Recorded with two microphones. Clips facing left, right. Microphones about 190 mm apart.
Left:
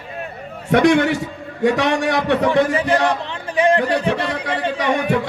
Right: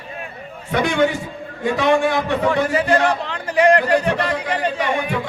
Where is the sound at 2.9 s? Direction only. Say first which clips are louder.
Even; 20° left (ahead or behind).